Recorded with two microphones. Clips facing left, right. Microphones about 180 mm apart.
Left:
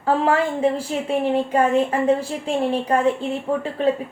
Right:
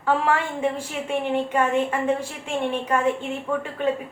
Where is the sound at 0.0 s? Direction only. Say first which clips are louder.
Left 3 dB; 35° left (ahead or behind).